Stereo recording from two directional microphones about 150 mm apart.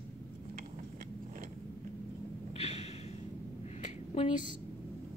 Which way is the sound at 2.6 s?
45° left (ahead or behind).